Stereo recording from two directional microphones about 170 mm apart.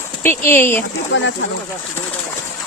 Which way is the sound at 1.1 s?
90° left.